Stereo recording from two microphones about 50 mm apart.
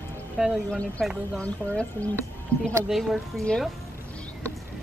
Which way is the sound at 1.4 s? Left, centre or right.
Left.